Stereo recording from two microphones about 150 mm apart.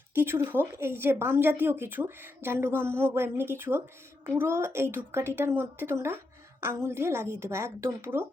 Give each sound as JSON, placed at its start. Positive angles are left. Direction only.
{"t": 0.1, "sound": "speech", "side_deg": -15}